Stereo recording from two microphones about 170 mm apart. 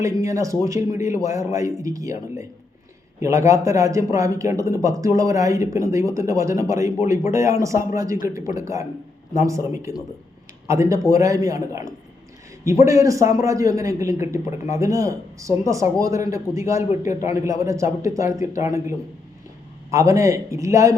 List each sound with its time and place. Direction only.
0.0 s a man's voice: 20° right (ahead or behind)